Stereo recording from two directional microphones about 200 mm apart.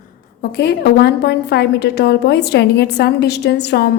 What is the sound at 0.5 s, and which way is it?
A woman's voice, 55° left (ahead or behind).